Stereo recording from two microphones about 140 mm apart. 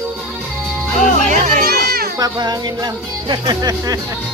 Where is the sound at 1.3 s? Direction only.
70° right (ahead or behind).